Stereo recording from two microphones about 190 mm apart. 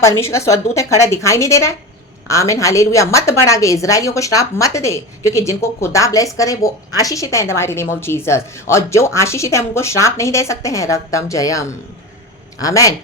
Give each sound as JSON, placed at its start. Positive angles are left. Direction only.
{"t": 0.2, "sound": "a woman's voice", "side_deg": 15}